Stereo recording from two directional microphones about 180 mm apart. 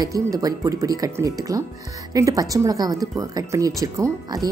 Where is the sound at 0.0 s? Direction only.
20° right (ahead or behind).